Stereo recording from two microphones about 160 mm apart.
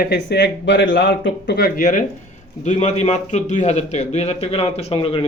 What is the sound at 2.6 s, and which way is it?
A man's voice, 45° left (ahead or behind).